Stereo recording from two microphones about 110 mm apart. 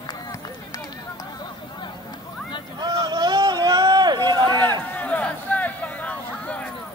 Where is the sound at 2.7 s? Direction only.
40° right (ahead or behind).